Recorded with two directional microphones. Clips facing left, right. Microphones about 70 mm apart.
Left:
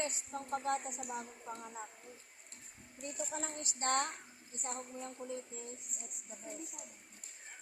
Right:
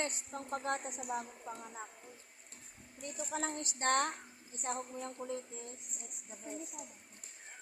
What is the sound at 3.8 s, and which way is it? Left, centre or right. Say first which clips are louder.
Speech: right 3 dB; right.